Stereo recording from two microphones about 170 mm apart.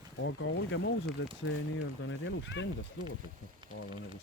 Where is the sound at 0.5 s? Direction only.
90° left.